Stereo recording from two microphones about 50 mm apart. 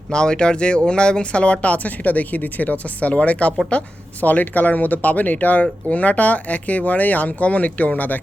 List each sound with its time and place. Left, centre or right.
0.1 s speech: centre; by 8.2 s left